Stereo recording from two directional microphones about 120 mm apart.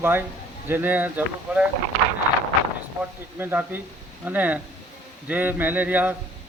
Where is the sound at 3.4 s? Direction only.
15° right (ahead or behind).